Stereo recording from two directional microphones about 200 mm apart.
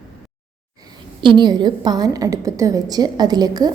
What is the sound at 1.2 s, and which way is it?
A woman's voice, 25° right (ahead or behind).